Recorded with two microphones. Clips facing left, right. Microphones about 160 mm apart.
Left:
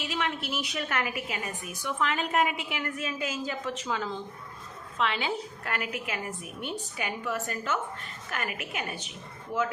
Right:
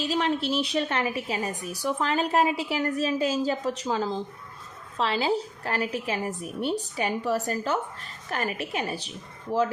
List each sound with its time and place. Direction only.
0.0 s a woman's voice: 35° right (ahead or behind)